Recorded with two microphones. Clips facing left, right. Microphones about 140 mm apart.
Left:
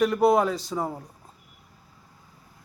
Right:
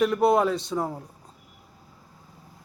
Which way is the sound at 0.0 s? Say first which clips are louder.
Even; centre (ahead or behind).